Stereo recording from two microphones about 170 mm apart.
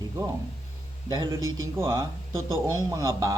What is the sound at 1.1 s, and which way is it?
A man's voice, 25° right (ahead or behind).